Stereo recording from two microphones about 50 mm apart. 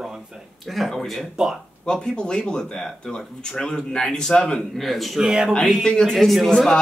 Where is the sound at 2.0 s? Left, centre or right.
Centre.